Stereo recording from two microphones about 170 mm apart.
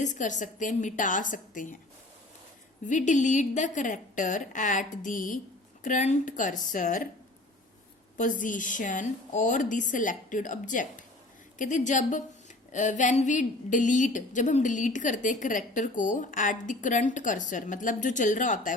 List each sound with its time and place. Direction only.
0.0 s a woman's voice: 45° left (ahead or behind)
2.8 s a woman's voice: 45° left (ahead or behind)
8.2 s a woman's voice: 50° left (ahead or behind)